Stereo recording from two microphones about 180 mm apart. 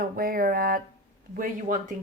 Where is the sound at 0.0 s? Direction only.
55° right (ahead or behind).